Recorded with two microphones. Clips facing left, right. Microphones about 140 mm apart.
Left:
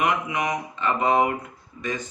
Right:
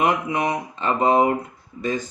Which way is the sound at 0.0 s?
35° right (ahead or behind).